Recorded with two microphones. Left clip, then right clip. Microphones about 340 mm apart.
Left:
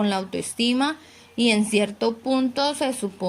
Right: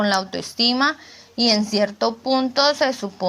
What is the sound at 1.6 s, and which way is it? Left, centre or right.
Speech, centre.